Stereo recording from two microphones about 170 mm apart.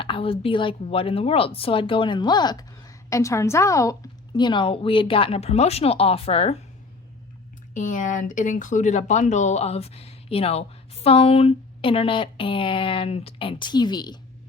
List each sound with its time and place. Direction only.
0.0 s speech: 30° left (ahead or behind)
7.7 s speech: 50° left (ahead or behind); by 14.2 s 25° left (ahead or behind)